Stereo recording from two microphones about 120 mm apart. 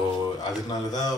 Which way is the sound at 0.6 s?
35° left (ahead or behind).